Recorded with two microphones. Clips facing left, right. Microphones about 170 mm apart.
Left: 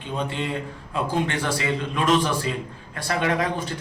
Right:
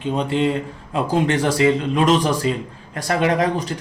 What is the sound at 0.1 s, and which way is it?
A man's voice, 40° right (ahead or behind).